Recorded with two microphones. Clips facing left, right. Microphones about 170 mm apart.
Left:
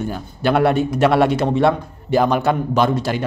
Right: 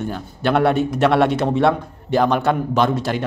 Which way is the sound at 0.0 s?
5° left (ahead or behind).